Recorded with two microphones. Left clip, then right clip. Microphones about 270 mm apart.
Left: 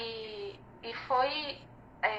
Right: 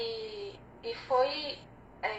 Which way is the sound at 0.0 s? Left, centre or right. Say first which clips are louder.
Right 2 dB; left.